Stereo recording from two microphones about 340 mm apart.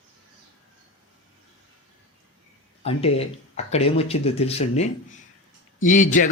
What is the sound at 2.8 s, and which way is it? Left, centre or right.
Speech, centre.